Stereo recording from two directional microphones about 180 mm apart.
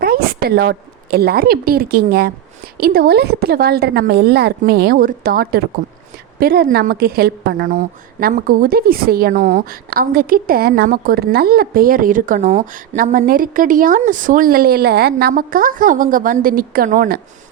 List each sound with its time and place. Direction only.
0.0 s a woman's voice: 60° right (ahead or behind)